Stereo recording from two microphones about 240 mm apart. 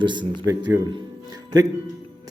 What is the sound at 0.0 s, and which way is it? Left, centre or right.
Speech, centre.